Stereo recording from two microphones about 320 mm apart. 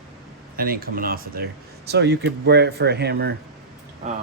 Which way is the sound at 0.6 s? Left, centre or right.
Right.